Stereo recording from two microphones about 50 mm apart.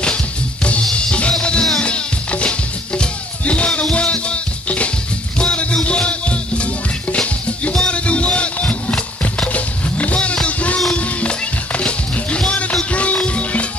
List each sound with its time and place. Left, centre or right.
0.9 s music: left
9.5 s vehicle: left
11.0 s music: left